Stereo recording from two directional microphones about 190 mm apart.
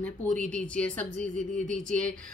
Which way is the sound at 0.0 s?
5° left (ahead or behind).